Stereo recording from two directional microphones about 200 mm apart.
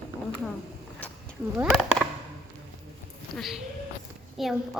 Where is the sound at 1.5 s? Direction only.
5° right (ahead or behind).